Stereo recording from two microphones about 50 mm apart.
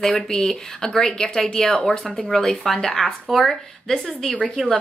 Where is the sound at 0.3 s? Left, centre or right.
Centre.